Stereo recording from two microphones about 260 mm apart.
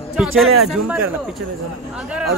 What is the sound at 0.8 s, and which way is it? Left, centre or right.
Speech, centre.